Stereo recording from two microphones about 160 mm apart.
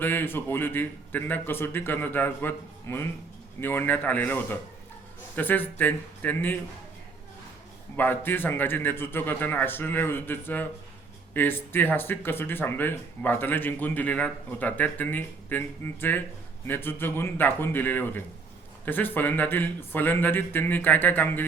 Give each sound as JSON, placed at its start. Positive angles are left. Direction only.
{"t": 0.0, "sound": "speech", "side_deg": 10}
{"t": 7.9, "sound": "speech", "side_deg": 10}